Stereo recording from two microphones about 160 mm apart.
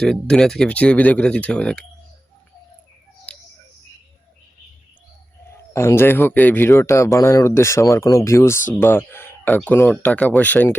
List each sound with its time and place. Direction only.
0.0 s speech: 5° left (ahead or behind)
3.3 s a sound: 5° left (ahead or behind)
5.7 s speech: 15° left (ahead or behind)